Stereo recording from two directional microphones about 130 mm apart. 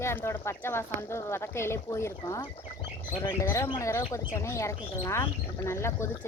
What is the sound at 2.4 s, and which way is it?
Speech, 40° left (ahead or behind).